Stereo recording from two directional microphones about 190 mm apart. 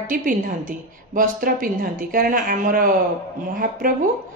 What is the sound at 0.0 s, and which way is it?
A woman's voice, 45° right (ahead or behind).